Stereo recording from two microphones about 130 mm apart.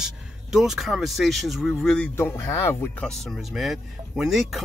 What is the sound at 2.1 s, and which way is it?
Speech, 15° left (ahead or behind).